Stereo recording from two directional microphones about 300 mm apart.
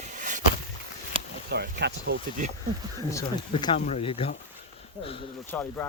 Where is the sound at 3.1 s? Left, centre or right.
Centre.